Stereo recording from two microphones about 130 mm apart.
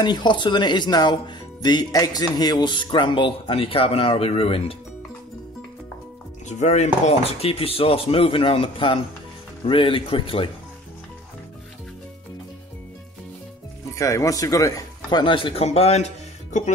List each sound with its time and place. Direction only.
0.0 s speech: 35° left (ahead or behind)
6.4 s speech: 60° left (ahead or behind); by 10.5 s 40° left (ahead or behind)
13.9 s speech: 25° left (ahead or behind); by 16.1 s 55° left (ahead or behind)